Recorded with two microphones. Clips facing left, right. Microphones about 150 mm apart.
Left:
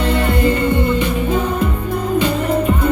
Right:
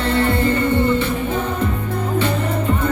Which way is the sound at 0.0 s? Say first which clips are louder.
Left 1 dB; 15° left (ahead or behind).